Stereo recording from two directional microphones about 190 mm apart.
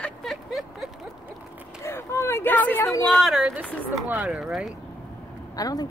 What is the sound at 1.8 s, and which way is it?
Speech, 15° left (ahead or behind).